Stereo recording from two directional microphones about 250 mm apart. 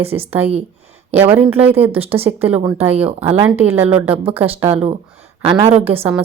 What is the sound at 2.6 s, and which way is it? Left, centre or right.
Speech, right.